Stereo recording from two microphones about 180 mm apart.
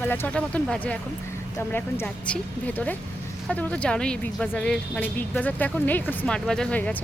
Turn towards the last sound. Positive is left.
turn(degrees=10)  # may be behind; listen again after turning